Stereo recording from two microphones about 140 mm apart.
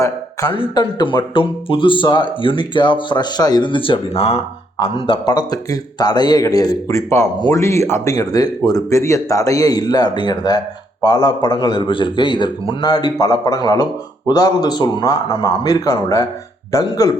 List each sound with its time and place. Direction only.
0.5 s a man's voice: 35° left (ahead or behind)